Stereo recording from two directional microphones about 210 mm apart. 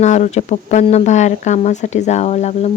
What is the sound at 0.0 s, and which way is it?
Speech, 35° left (ahead or behind).